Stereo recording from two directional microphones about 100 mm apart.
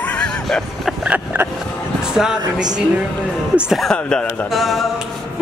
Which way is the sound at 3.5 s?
10° right (ahead or behind).